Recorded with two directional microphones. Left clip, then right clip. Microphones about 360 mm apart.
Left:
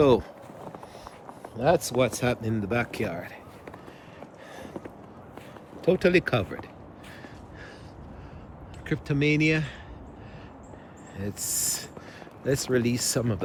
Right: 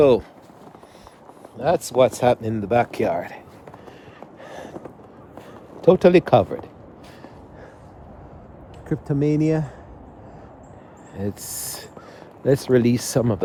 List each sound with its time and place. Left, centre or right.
0.0 s speech: centre
1.5 s speech: centre; by 3.4 s right
4.4 s a sound: right
5.8 s speech: centre
8.9 s speech: centre
11.2 s speech: centre